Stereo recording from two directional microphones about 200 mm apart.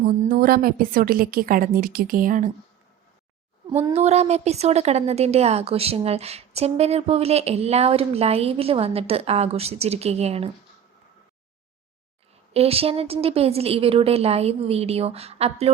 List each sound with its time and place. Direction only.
0.2 s a woman's voice: 45° right (ahead or behind)
3.9 s speech: 35° right (ahead or behind)
12.5 s a woman's voice: 30° right (ahead or behind)